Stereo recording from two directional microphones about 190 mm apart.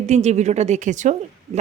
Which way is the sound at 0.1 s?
35° right (ahead or behind).